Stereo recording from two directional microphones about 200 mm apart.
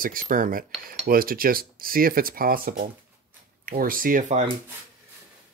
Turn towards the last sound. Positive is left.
turn(degrees=-45)  # may be behind; listen again after turning